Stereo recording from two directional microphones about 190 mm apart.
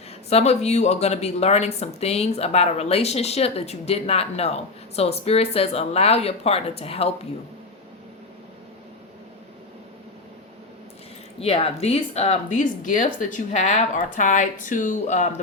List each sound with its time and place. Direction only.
0.3 s speech: 35° left (ahead or behind)
11.3 s speech: 30° left (ahead or behind)